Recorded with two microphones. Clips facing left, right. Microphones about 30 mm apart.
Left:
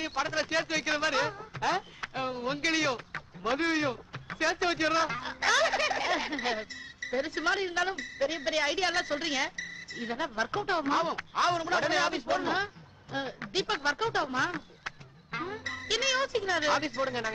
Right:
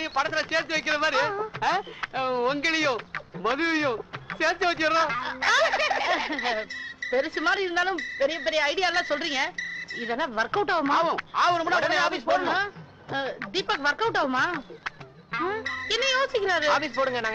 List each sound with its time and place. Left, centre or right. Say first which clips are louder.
0.0 s speech: right 5 dB; centre